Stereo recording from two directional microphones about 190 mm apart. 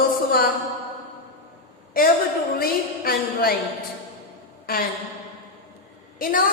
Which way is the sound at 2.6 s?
50° left (ahead or behind).